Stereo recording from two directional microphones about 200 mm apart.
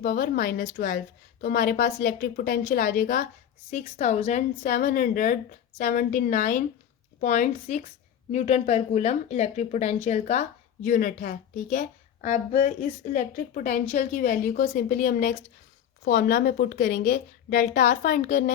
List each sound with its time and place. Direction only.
0.0 s a woman's voice: 45° left (ahead or behind)
0.6 s a woman's voice: 40° left (ahead or behind)
16.0 s a woman's voice: 50° left (ahead or behind)
17.5 s a woman's voice: 40° left (ahead or behind)